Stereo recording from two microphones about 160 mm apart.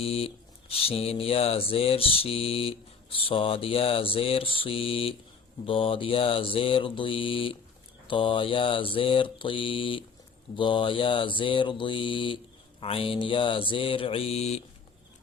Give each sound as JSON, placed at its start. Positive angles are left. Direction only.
{"t": 0.0, "sound": "mantra", "side_deg": 40}